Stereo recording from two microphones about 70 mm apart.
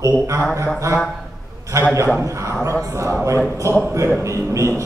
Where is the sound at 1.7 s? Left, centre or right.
Right.